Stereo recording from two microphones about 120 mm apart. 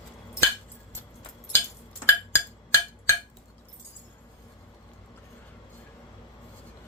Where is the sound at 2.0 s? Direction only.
20° left (ahead or behind).